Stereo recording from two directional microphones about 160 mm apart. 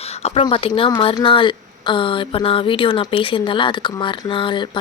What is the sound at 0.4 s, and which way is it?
Speech, 30° left (ahead or behind).